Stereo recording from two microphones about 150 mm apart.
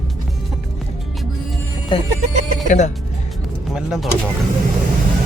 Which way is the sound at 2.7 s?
50° left (ahead or behind).